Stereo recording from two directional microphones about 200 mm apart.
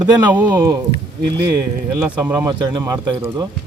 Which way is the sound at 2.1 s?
10° right (ahead or behind).